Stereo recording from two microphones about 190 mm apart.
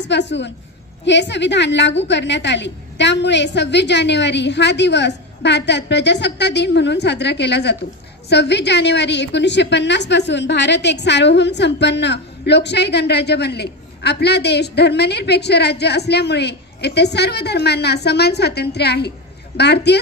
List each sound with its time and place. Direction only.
0.1 s a woman's voice: 70° left (ahead or behind)